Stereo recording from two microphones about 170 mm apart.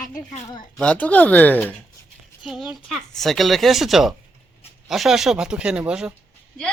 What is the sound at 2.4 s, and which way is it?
Speech, 5° right (ahead or behind).